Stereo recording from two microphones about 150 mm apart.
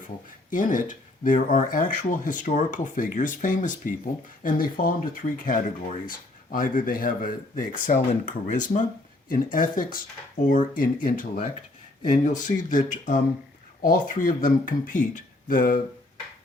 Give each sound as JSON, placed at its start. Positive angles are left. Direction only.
{"t": 0.5, "sound": "speech", "side_deg": 60}
{"t": 4.4, "sound": "speech", "side_deg": 70}